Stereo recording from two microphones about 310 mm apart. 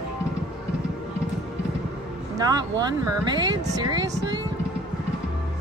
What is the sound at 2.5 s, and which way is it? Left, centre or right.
Speech, centre.